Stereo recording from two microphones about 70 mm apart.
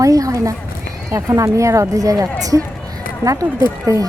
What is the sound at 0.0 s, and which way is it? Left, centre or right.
Speech, right.